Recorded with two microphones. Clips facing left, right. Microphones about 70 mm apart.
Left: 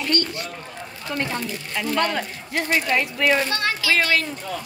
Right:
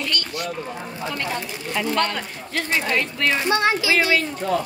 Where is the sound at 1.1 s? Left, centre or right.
Left.